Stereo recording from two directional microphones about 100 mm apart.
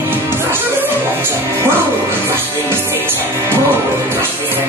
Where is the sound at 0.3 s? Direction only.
25° right (ahead or behind).